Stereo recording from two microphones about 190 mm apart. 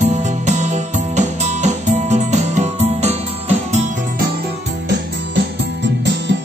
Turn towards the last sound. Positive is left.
turn(degrees=-65)  # may be behind; listen again after turning